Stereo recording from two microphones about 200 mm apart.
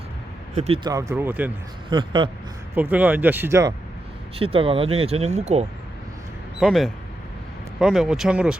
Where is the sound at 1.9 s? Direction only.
25° right (ahead or behind).